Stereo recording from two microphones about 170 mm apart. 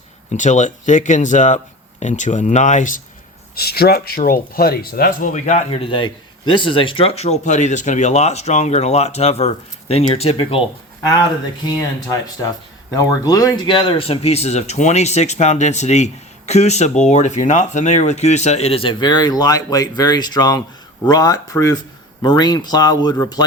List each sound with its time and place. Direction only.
0.3 s speech: 45° left (ahead or behind)
3.5 s speech: 65° left (ahead or behind); by 10.6 s 35° left (ahead or behind)
12.0 s speech: 20° left (ahead or behind)